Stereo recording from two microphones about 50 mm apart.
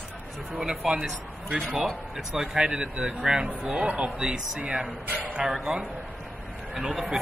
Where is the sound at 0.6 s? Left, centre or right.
Centre.